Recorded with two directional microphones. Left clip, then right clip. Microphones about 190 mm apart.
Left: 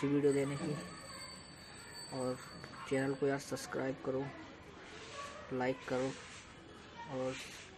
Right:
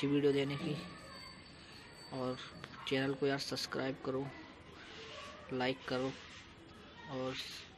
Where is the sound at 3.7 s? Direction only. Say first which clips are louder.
Left 4 dB; 15° right (ahead or behind).